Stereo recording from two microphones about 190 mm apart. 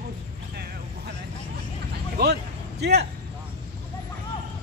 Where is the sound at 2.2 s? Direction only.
60° right (ahead or behind).